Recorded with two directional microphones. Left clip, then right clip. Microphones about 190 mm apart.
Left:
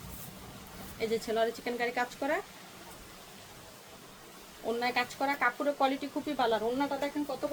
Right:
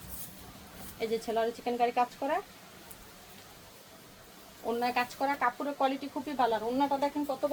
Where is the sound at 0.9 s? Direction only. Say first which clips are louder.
Left 1 dB; 25° left (ahead or behind).